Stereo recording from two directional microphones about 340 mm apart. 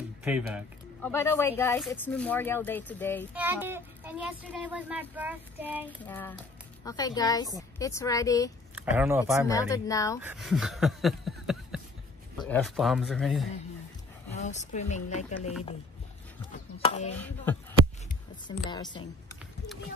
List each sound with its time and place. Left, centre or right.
0.2 s speech: centre
3.3 s speech: centre
5.9 s a woman's voice: centre
8.9 s speech: centre
9.5 s a woman's voice: centre
10.2 s speech: centre
14.3 s speech: left
17.1 s speech: centre